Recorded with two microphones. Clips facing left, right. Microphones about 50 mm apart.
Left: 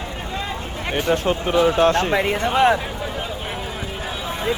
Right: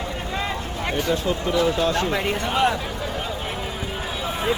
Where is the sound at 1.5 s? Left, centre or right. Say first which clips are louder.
Left 6 dB; left.